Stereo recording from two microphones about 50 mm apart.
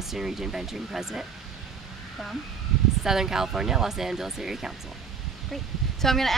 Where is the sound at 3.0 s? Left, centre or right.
Centre.